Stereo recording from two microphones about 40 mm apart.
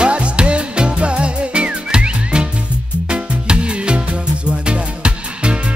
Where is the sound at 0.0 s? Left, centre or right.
Right.